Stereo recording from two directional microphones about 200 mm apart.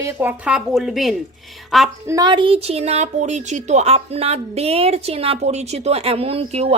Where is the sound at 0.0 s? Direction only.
10° right (ahead or behind).